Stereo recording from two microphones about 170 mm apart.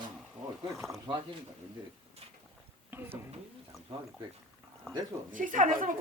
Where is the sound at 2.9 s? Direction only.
15° right (ahead or behind).